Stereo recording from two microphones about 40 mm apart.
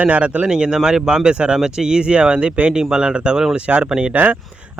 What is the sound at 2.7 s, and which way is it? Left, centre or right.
A man's voice, centre.